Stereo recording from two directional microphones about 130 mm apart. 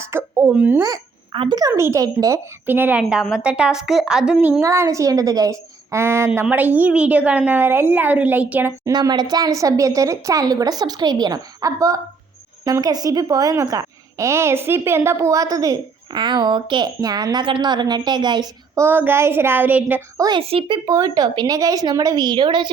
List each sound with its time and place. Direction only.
0.1 s a sound: 20° right (ahead or behind)
0.5 s a woman's voice: 10° right (ahead or behind)
0.8 s a sound: 30° right (ahead or behind)
1.4 s a woman's voice: 35° right (ahead or behind)
2.6 s a woman's voice: 15° right (ahead or behind)
3.0 s a woman's voice: centre (ahead or behind)
4.6 s a woman's voice: 25° right (ahead or behind)
8.9 s a woman's voice: 30° right (ahead or behind); by 20.0 s 15° right (ahead or behind)
20.1 s speech: 30° right (ahead or behind)
20.4 s speech: 45° right (ahead or behind)
20.8 s a woman's voice: 30° right (ahead or behind)